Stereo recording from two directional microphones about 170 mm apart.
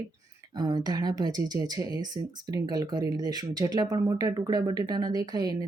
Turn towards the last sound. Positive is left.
turn(degrees=-25)  # may be behind; listen again after turning